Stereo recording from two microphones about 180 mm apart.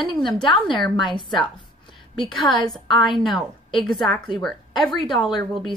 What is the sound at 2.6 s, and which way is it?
Speech, 25° left (ahead or behind).